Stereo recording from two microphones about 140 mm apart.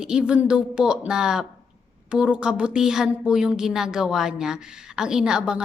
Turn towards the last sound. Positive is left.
turn(degrees=-5)  # may be behind; listen again after turning